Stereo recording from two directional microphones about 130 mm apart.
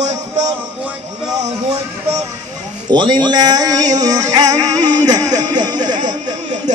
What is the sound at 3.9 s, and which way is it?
Music, 30° right (ahead or behind).